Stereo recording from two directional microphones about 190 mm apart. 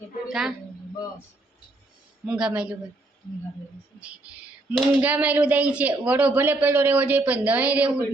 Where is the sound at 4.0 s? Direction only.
5° right (ahead or behind).